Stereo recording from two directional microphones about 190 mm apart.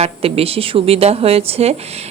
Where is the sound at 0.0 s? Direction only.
30° right (ahead or behind).